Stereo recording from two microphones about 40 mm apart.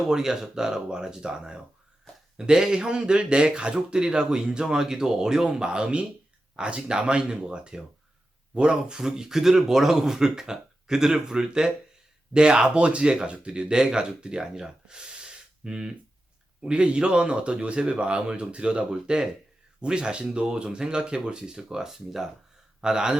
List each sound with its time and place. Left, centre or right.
0.0 s speech: centre
2.1 s a sound: left
2.4 s speech: centre